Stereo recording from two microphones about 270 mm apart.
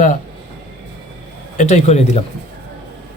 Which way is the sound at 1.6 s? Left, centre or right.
Left.